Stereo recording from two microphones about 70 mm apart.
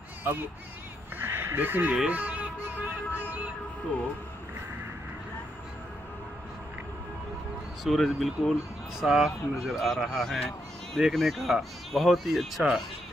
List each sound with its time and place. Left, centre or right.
0.2 s speech: right
2.0 s music: right
7.8 s speech: centre